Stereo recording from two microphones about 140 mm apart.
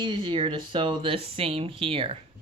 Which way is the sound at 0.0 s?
35° right (ahead or behind).